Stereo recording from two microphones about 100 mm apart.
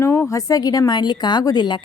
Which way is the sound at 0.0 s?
25° left (ahead or behind).